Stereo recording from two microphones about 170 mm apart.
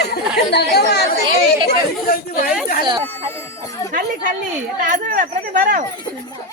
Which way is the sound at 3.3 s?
20° left (ahead or behind).